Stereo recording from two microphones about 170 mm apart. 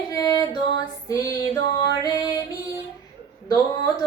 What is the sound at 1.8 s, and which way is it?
Music, 20° left (ahead or behind).